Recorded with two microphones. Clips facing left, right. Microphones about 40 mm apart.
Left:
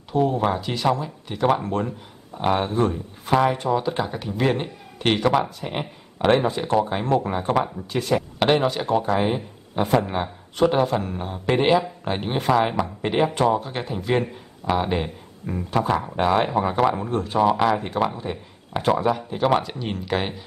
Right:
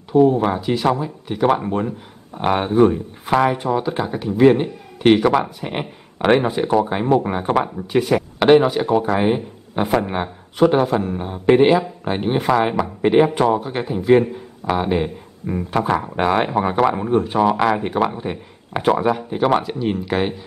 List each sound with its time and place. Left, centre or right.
0.1 s speech: centre
2.3 s speech: right
3.4 s speech: centre
5.3 s speech: centre
7.2 s speech: right; by 15.5 s centre
15.5 s speech: right; by 20.3 s centre